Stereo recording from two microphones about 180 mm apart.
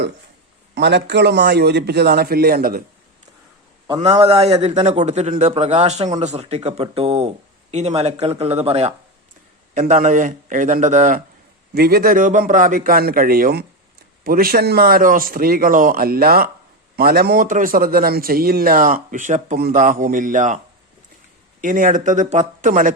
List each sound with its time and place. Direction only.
0.8 s a man's voice: 75° right (ahead or behind); by 2.8 s 55° right (ahead or behind)
4.2 s speech: 35° right (ahead or behind)
11.7 s speech: 60° right (ahead or behind)
21.6 s speech: 45° right (ahead or behind)